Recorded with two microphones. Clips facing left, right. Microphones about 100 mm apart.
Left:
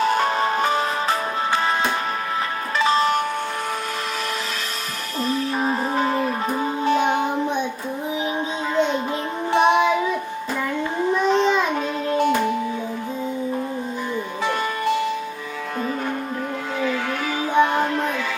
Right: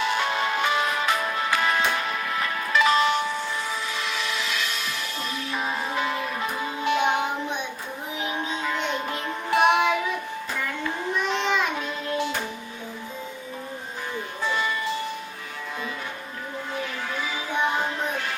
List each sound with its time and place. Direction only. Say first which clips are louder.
0.0 s music: left 5 dB; 40° left (ahead or behind)
5.3 s music: left 8 dB; 40° left (ahead or behind)
9.5 s music: left 3 dB; 30° left (ahead or behind)
11.2 s child singing: left 6 dB; 35° left (ahead or behind)
12.0 s music: left 10 dB; 50° left (ahead or behind)
14.4 s music: left 4 dB; 55° left (ahead or behind)
17.6 s music: left 7 dB; 60° left (ahead or behind)